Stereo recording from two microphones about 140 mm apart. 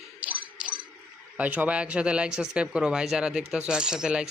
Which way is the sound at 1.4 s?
10° right (ahead or behind).